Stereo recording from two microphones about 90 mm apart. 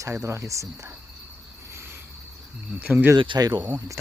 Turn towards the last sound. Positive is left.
turn(degrees=-45)  # may be behind; listen again after turning